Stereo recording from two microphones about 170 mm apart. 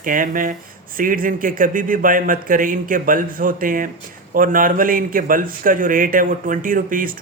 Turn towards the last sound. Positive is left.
turn(degrees=-55)  # may be behind; listen again after turning